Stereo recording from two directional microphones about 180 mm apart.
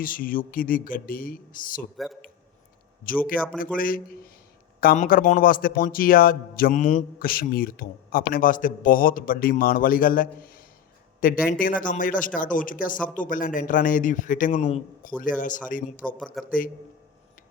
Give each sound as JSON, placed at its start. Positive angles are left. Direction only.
{"t": 0.0, "sound": "a man's voice", "side_deg": 50}
{"t": 3.1, "sound": "a man's voice", "side_deg": 50}
{"t": 16.1, "sound": "speech", "side_deg": 0}